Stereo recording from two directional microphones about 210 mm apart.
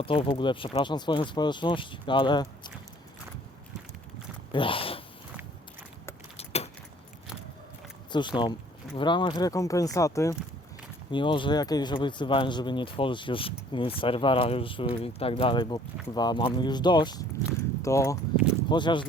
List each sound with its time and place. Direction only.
0.0 s speech: 25° left (ahead or behind)
4.5 s speech: 25° left (ahead or behind)
6.3 s keys jangling: 30° left (ahead or behind)
8.1 s speech: 20° left (ahead or behind)